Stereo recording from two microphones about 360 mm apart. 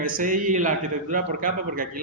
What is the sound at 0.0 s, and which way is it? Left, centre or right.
A man's voice, right.